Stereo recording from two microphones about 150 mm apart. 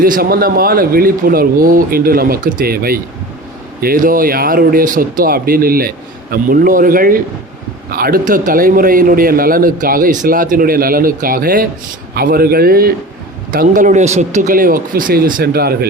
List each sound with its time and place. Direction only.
0.0 s a man's voice: 75° right (ahead or behind)
3.8 s a man's voice: 75° right (ahead or behind)
6.3 s a man's voice: 65° right (ahead or behind)
12.1 s a man's voice: 90° right
13.5 s a man's voice: 65° right (ahead or behind); by 15.9 s 90° right